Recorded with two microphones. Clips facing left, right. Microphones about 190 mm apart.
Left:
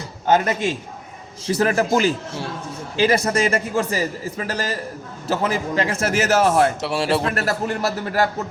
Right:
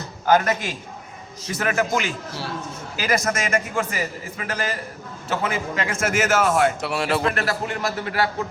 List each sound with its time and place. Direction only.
0.3 s a man's voice: 25° left (ahead or behind); by 8.3 s 40° left (ahead or behind)